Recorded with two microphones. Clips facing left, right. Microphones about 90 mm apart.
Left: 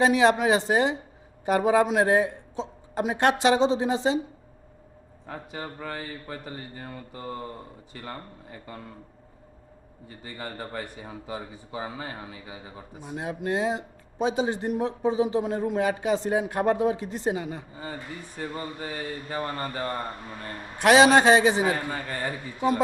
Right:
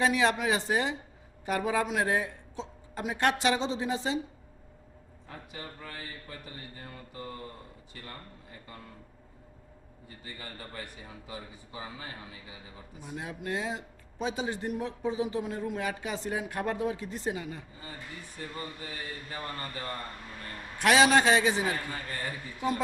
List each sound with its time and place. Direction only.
0.0 s speech: 25° left (ahead or behind)
5.9 s a man's voice: 35° left (ahead or behind)
10.3 s a man's voice: 40° left (ahead or behind)
20.7 s speech: 20° left (ahead or behind); by 22.4 s 35° left (ahead or behind)